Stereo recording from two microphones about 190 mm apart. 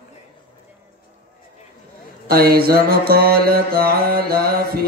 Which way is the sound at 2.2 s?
55° right (ahead or behind).